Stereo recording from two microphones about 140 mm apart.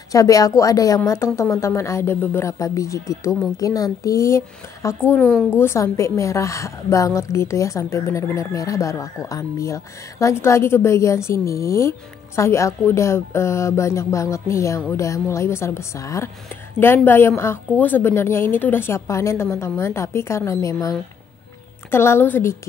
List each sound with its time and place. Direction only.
0.1 s a woman's voice: 25° left (ahead or behind)
5.3 s a woman's voice: 5° right (ahead or behind)
5.6 s a woman's voice: 20° left (ahead or behind)
21.9 s a woman's voice: 15° left (ahead or behind)